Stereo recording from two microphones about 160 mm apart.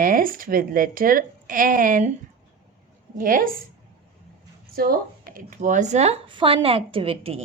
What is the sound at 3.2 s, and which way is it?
Speech, 60° right (ahead or behind).